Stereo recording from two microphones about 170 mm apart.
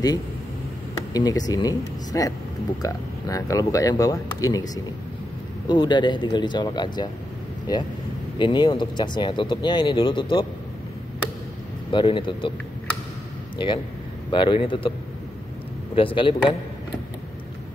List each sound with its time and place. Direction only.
1.1 s speech: 20° left (ahead or behind)
5.7 s speech: 25° left (ahead or behind)
8.4 s speech: 25° left (ahead or behind)
11.9 s speech: 30° left (ahead or behind)
13.6 s speech: 30° left (ahead or behind)
15.9 s a man's voice: 30° left (ahead or behind)